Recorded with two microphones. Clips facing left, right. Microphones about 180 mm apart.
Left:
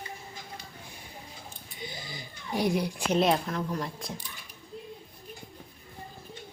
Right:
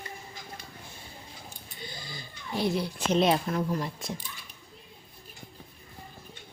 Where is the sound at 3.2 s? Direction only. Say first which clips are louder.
Right 1 dB; 5° right (ahead or behind).